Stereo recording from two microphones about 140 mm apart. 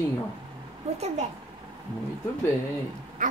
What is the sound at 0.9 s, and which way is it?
Speech, 50° right (ahead or behind).